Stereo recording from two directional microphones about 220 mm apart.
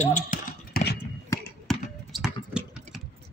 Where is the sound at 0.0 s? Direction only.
35° left (ahead or behind).